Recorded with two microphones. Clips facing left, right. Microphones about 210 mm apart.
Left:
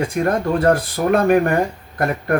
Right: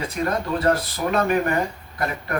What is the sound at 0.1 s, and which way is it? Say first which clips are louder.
Speech: left 6 dB; 50° left (ahead or behind).